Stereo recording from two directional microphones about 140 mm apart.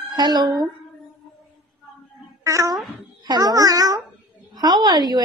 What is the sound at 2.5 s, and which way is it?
A child's voice, 25° right (ahead or behind).